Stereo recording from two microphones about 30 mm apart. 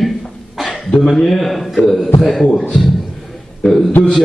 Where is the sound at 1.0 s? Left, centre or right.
Centre.